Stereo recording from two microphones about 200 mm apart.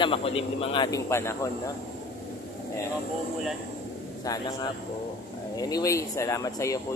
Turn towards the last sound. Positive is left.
turn(degrees=15)  # may be behind; listen again after turning